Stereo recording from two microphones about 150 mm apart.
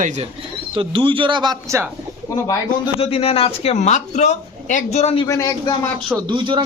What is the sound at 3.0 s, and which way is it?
Speech, 40° left (ahead or behind).